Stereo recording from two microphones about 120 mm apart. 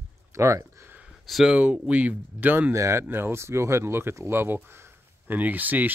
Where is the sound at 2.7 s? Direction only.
25° right (ahead or behind).